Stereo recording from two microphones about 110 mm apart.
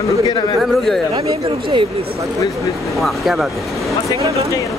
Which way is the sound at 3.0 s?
Centre (ahead or behind).